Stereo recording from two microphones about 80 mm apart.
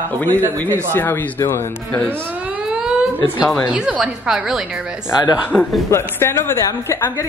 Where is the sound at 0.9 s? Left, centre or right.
Left.